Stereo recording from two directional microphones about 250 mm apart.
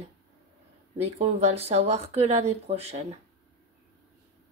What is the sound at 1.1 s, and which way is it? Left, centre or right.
Speech, right.